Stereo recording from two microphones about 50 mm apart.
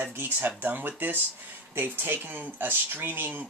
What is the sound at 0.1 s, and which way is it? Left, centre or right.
Speech, right.